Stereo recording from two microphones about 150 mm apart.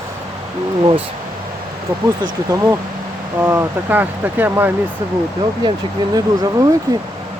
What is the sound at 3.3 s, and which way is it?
Speech, 15° right (ahead or behind).